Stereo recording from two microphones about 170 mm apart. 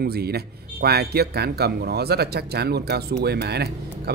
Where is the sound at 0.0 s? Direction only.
70° right (ahead or behind).